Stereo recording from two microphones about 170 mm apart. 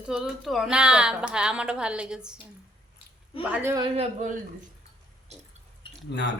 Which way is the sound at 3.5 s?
15° right (ahead or behind).